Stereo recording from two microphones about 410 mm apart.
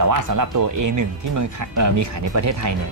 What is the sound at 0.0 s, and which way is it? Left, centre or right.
Speech, right.